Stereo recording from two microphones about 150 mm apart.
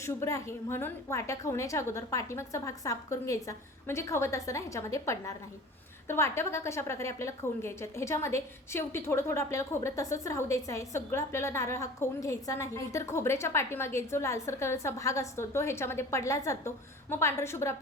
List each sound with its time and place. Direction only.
0.0 s a woman's voice: 20° left (ahead or behind)